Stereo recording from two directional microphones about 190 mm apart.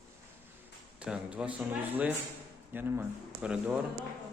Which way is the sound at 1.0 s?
5° right (ahead or behind).